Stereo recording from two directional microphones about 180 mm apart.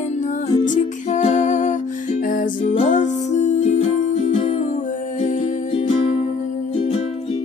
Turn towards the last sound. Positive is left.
turn(degrees=30)  # may be behind; listen again after turning